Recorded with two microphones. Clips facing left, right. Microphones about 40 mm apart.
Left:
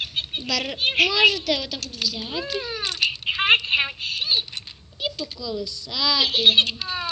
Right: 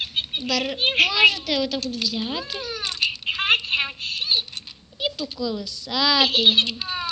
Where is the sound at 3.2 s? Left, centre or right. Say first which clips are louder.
Left 3 dB; centre.